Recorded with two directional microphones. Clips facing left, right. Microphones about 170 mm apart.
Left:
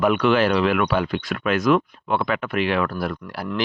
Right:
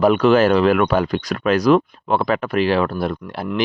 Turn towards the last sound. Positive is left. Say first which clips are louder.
# right 4 dB
turn(degrees=-25)  # may be behind; listen again after turning